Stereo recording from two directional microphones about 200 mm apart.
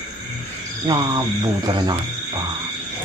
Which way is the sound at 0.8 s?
20° right (ahead or behind).